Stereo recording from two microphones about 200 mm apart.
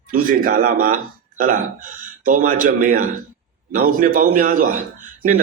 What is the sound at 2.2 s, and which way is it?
A man's voice, 45° right (ahead or behind).